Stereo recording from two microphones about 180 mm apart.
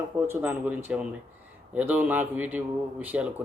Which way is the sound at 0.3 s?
10° right (ahead or behind).